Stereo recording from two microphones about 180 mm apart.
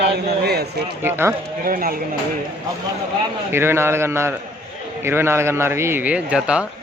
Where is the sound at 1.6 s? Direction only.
55° right (ahead or behind).